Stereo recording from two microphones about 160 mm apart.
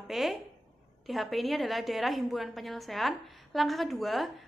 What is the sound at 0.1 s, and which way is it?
A woman's voice, centre (ahead or behind).